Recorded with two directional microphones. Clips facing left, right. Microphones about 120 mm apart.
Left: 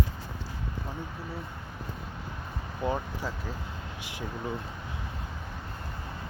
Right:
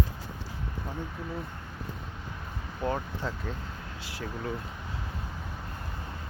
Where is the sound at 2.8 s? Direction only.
5° left (ahead or behind).